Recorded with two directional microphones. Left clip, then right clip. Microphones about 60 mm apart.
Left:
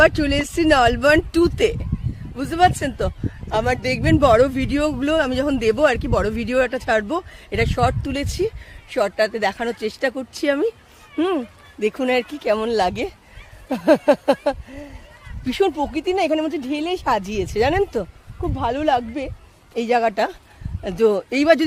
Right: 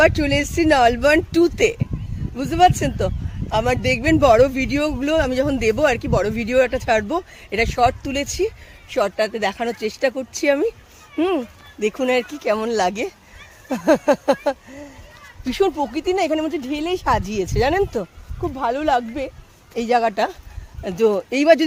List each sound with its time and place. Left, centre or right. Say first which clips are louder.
0.0 s speech: even; left
4.9 s speech: left 1 dB; left
15.4 s speech: even; left